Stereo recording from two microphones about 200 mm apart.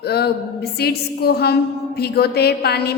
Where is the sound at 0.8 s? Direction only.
50° left (ahead or behind).